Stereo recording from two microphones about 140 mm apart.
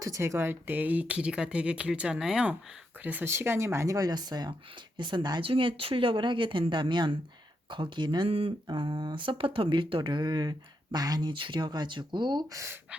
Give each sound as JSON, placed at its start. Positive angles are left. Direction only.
{"t": 0.0, "sound": "speech", "side_deg": -20}